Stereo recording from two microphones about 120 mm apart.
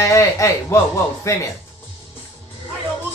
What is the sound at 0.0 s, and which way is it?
A man's voice, 25° left (ahead or behind).